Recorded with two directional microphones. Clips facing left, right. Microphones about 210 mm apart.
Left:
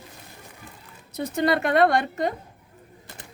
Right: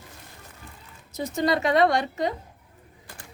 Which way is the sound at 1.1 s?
60° left (ahead or behind).